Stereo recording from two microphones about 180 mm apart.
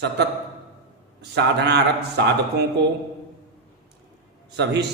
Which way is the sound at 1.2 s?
70° right (ahead or behind).